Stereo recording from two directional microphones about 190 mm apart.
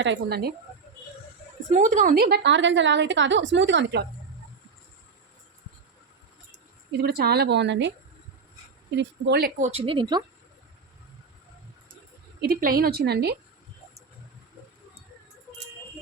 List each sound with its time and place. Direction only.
0.0 s a woman's voice: 60° right (ahead or behind)
1.7 s a woman's voice: 40° right (ahead or behind); by 4.0 s 65° right (ahead or behind)
6.9 s a woman's voice: 55° right (ahead or behind)
9.0 s a woman's voice: 65° right (ahead or behind)
9.6 s speech: 35° right (ahead or behind)
12.4 s a woman's voice: 50° right (ahead or behind)